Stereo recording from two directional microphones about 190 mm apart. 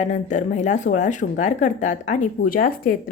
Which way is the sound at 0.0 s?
40° left (ahead or behind).